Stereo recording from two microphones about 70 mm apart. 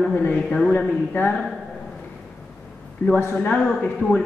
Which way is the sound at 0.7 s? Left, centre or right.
Left.